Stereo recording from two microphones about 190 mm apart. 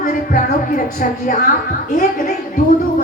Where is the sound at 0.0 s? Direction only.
45° left (ahead or behind).